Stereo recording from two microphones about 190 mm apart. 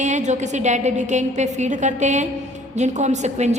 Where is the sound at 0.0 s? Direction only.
40° right (ahead or behind).